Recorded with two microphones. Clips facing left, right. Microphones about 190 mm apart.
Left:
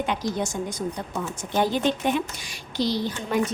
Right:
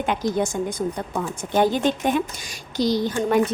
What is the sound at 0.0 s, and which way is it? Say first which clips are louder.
A woman's voice: right 4 dB; 50° right (ahead or behind).